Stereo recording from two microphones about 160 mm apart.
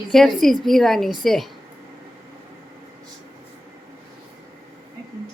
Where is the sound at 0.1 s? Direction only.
Centre (ahead or behind).